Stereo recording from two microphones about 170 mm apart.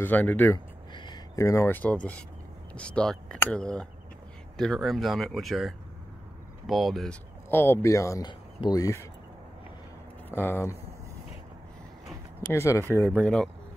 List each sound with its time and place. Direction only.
0.0 s speech: 10° left (ahead or behind)
0.9 s speech: 25° left (ahead or behind); by 7.2 s centre (ahead or behind)
7.4 s speech: 15° left (ahead or behind)
10.3 s speech: 15° left (ahead or behind)
12.5 s speech: 15° left (ahead or behind)
13.2 s speech: 5° left (ahead or behind)